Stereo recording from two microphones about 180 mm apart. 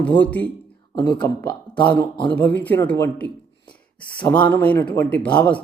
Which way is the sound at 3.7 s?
25° left (ahead or behind).